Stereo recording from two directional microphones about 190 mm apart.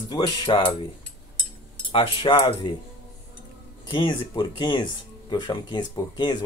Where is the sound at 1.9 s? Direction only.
25° left (ahead or behind).